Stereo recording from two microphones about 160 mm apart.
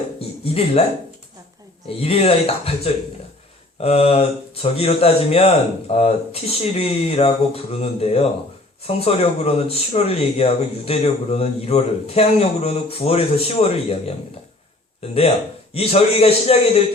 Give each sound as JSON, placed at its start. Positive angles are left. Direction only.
{"t": 0.4, "sound": "speech", "side_deg": 40}
{"t": 2.0, "sound": "speech", "side_deg": 40}